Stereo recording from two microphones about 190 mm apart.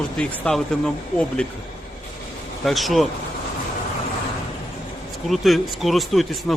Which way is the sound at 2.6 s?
Centre (ahead or behind).